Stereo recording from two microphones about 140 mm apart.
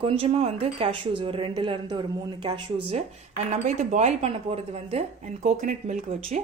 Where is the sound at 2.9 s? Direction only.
55° right (ahead or behind).